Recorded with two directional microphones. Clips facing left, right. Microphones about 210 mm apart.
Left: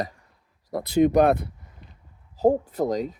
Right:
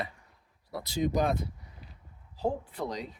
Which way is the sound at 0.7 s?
55° left (ahead or behind).